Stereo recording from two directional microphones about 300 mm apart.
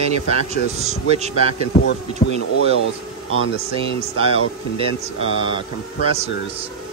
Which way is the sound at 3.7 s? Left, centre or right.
Centre.